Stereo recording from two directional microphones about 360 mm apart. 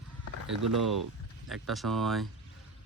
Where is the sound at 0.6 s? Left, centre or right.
Centre.